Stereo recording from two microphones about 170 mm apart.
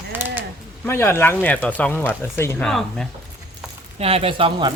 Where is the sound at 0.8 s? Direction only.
15° left (ahead or behind).